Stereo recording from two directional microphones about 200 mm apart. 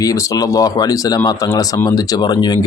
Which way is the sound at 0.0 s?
15° left (ahead or behind).